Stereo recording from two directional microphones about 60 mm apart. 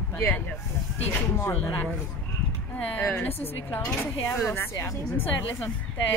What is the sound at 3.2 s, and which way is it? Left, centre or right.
Speech, left.